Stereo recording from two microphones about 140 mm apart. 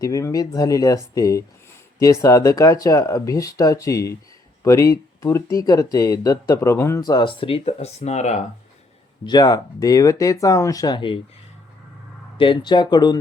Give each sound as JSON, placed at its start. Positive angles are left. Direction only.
{"t": 0.0, "sound": "speech", "side_deg": 25}
{"t": 9.2, "sound": "speech", "side_deg": 30}
{"t": 12.4, "sound": "speech", "side_deg": 35}